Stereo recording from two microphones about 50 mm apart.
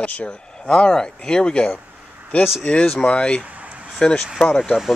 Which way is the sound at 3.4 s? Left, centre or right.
Right.